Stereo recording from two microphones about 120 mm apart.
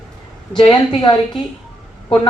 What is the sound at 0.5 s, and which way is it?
Speech, 55° left (ahead or behind).